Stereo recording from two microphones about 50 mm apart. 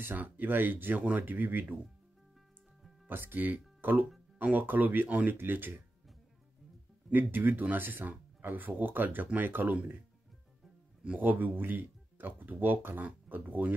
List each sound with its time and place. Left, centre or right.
0.0 s speech: right
3.1 s speech: right
5.3 s speech: right
7.1 s speech: right
11.1 s speech: right